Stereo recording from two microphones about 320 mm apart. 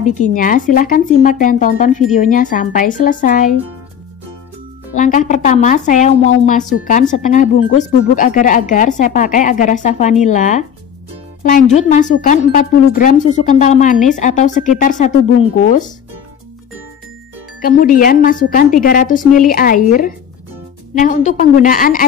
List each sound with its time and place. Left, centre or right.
0.0 s speech: left
4.9 s speech: left
17.6 s speech: left